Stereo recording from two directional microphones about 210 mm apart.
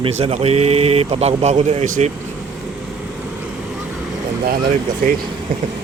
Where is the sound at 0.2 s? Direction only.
30° right (ahead or behind).